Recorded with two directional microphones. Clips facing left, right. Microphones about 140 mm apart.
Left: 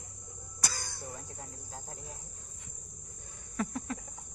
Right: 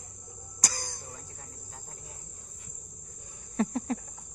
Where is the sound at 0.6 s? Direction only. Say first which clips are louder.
Right 2 dB; 45° right (ahead or behind).